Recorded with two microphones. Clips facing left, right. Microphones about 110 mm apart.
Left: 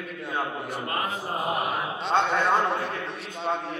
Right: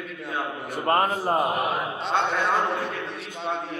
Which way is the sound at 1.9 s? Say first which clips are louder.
Left 5 dB; centre (ahead or behind).